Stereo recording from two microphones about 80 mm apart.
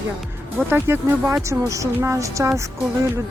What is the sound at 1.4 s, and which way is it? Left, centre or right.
A woman's voice, right.